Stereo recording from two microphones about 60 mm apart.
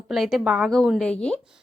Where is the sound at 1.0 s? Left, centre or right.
Centre.